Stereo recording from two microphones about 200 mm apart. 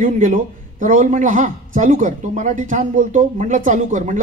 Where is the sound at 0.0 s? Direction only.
40° right (ahead or behind).